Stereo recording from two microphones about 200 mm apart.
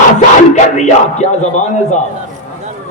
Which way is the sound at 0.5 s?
35° left (ahead or behind).